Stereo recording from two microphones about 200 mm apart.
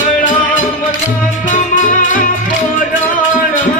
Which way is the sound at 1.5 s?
40° left (ahead or behind).